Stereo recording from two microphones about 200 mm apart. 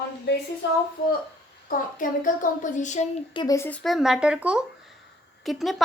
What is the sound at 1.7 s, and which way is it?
Speech, 40° left (ahead or behind).